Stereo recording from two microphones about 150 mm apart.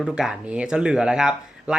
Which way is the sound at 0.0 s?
5° right (ahead or behind).